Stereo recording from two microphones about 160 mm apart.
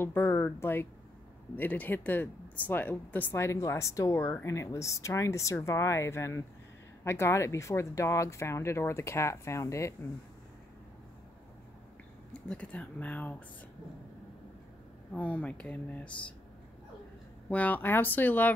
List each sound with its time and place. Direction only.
0.0 s speech: 15° left (ahead or behind)
12.4 s speech: 5° left (ahead or behind)
15.1 s speech: 10° left (ahead or behind)
17.5 s speech: 10° left (ahead or behind)